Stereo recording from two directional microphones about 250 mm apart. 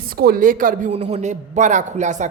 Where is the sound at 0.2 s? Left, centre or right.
Right.